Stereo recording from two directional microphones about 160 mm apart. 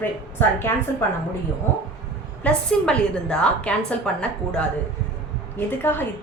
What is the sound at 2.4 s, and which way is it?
A woman's voice, 5° left (ahead or behind).